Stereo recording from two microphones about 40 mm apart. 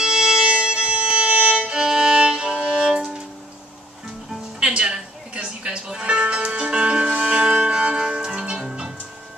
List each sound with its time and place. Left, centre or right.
0.0 s music: centre
1.5 s violin: right
4.6 s music: right